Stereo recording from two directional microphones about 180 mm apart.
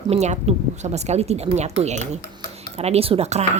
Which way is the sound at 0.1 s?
35° right (ahead or behind).